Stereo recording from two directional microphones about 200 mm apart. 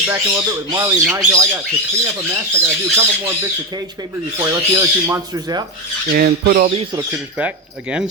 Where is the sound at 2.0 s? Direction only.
15° right (ahead or behind).